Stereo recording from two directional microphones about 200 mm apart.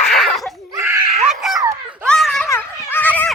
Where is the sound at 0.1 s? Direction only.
Centre (ahead or behind).